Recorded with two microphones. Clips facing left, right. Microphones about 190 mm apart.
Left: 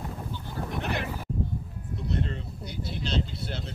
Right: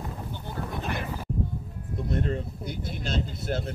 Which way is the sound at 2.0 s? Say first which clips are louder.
Right 3 dB; 50° right (ahead or behind).